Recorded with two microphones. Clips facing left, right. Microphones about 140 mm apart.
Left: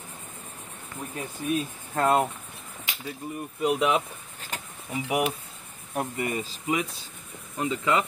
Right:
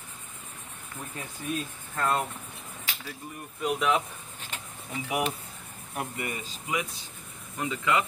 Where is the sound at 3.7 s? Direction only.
25° left (ahead or behind).